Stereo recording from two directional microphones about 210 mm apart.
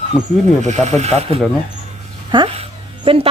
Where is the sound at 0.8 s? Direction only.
30° right (ahead or behind).